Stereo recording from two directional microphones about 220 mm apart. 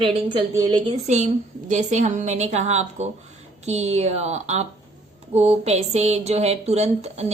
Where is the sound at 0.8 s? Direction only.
30° right (ahead or behind).